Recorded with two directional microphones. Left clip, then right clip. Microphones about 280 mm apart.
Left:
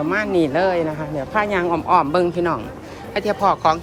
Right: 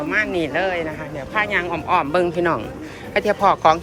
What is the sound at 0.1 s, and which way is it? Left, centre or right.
A woman's voice, centre.